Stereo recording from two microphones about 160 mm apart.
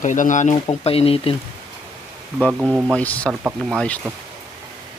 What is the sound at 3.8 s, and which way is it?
Speech, 10° left (ahead or behind).